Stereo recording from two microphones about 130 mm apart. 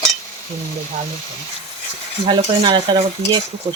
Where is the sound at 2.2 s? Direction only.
40° right (ahead or behind).